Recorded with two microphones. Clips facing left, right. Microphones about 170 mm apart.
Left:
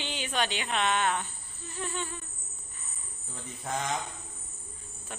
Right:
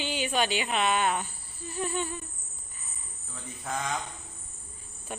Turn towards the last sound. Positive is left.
turn(degrees=-15)  # may be behind; listen again after turning